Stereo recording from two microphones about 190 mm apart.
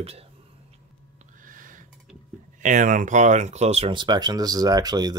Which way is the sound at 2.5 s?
40° right (ahead or behind).